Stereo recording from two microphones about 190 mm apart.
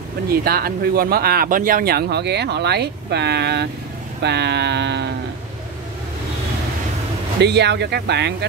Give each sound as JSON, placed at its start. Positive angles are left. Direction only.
{"t": 0.3, "sound": "speech", "side_deg": -50}
{"t": 7.3, "sound": "speech", "side_deg": -60}